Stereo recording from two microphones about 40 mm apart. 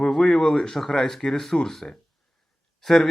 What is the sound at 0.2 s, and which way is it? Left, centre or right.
Speech, centre.